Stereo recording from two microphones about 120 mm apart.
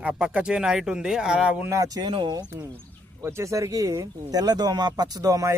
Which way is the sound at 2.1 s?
45° right (ahead or behind).